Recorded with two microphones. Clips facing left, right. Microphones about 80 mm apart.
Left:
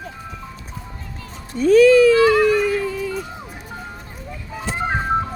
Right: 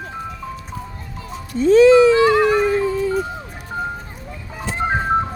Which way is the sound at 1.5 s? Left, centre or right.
Right.